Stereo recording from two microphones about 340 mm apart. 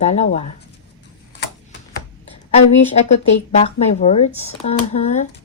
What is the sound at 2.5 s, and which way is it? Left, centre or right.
Speech, centre.